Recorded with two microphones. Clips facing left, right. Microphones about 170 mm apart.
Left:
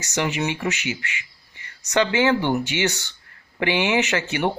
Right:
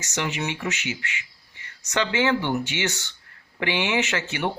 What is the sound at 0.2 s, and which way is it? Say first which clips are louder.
Speech: left 4 dB; 55° left (ahead or behind).